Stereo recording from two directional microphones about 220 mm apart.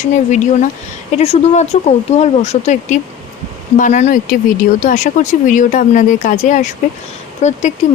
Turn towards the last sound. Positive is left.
turn(degrees=30)  # may be behind; listen again after turning